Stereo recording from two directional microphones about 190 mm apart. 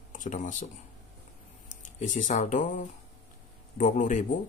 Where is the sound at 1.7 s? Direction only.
40° left (ahead or behind).